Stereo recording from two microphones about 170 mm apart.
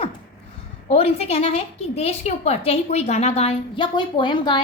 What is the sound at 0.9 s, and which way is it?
A woman's voice, 35° left (ahead or behind).